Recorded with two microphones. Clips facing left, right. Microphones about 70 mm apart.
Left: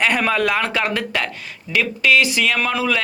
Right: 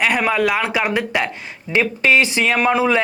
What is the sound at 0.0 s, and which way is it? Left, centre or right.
A man's voice, centre.